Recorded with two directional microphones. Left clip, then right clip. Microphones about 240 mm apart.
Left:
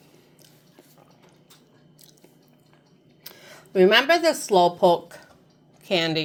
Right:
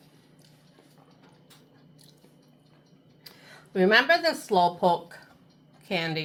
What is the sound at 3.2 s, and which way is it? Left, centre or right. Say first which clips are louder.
A woman's voice: left 4 dB; left.